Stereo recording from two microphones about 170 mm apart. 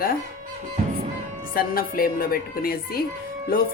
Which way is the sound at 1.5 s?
60° left (ahead or behind).